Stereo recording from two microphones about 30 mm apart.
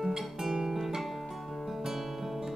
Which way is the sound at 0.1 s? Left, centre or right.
Centre.